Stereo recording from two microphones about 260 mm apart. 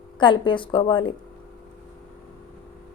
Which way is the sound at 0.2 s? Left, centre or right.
Centre.